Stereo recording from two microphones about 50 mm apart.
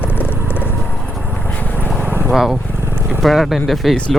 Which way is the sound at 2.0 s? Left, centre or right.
Right.